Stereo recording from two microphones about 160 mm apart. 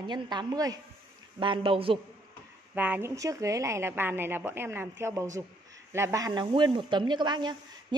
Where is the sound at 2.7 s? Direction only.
10° right (ahead or behind).